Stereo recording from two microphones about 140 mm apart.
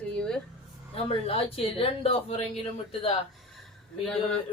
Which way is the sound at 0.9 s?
45° left (ahead or behind).